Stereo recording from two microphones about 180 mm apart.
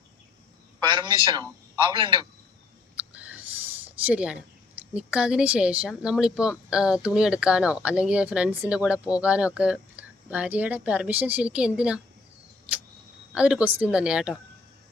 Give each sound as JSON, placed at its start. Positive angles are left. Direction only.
{"t": 0.9, "sound": "a man's voice", "side_deg": -25}
{"t": 2.9, "sound": "a sound", "side_deg": -10}
{"t": 4.8, "sound": "speech", "side_deg": -5}
{"t": 13.3, "sound": "speech", "side_deg": -5}